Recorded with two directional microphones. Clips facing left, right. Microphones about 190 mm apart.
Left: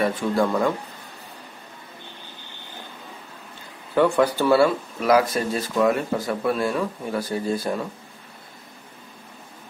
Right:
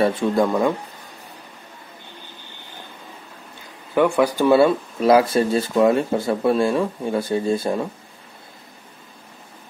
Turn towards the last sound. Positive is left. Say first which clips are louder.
# right 4 dB
turn(degrees=-25)  # may be behind; listen again after turning